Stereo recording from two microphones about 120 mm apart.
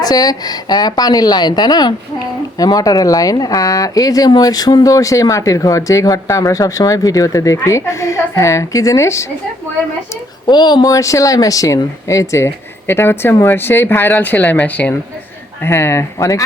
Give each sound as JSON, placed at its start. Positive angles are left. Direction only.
{"t": 0.0, "sound": "a woman's voice", "side_deg": 30}
{"t": 10.4, "sound": "a woman's voice", "side_deg": 35}